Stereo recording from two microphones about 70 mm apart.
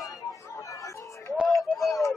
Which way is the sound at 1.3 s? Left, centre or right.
Centre.